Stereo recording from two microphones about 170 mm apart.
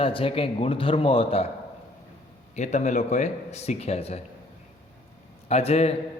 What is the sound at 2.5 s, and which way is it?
Speech, 45° left (ahead or behind).